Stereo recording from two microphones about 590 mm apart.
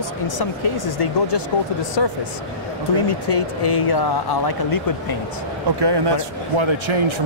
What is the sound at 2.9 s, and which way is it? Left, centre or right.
Speech, left.